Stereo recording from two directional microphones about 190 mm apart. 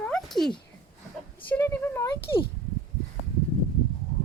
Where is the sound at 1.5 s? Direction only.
10° left (ahead or behind).